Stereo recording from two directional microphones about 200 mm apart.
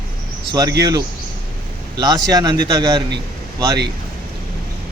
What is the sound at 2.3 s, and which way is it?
Speech, 20° right (ahead or behind).